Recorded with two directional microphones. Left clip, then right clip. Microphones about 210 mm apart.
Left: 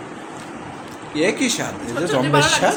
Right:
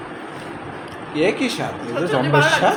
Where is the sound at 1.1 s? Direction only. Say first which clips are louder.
Even; 10° left (ahead or behind).